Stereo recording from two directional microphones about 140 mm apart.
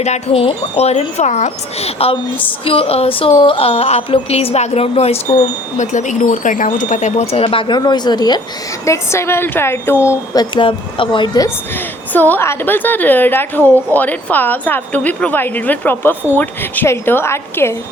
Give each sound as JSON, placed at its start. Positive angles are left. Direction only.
{"t": 0.0, "sound": "speech", "side_deg": 50}
{"t": 5.7, "sound": "speech", "side_deg": 60}
{"t": 8.8, "sound": "a woman's voice", "side_deg": 20}
{"t": 10.4, "sound": "speech", "side_deg": 35}
{"t": 12.1, "sound": "a woman's voice", "side_deg": 15}